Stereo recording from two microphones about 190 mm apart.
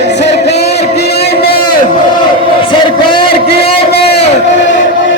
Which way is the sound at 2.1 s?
25° left (ahead or behind).